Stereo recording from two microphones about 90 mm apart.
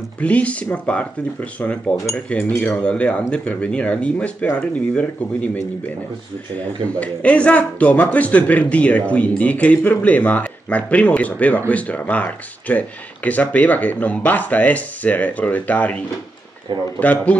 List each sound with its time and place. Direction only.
0.2 s a man's voice: 15° left (ahead or behind)
6.8 s a man's voice: 15° left (ahead or behind)
17.0 s a man's voice: 15° left (ahead or behind)